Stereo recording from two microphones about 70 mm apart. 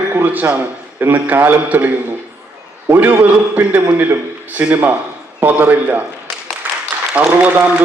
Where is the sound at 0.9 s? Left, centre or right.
Right.